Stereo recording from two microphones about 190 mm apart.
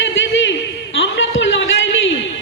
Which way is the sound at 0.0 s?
75° left (ahead or behind).